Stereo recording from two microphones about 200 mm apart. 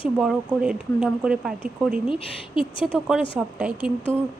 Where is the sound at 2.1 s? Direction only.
25° left (ahead or behind).